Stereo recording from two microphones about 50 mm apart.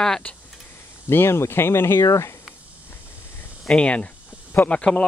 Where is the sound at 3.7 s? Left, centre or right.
Left.